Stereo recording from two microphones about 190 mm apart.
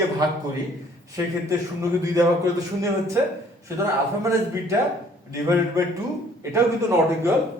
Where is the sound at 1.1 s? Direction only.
15° right (ahead or behind).